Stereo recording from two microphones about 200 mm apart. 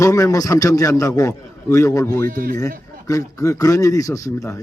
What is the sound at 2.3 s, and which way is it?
Speech, 45° right (ahead or behind).